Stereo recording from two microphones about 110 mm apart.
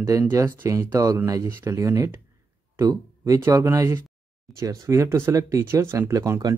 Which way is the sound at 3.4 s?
25° right (ahead or behind).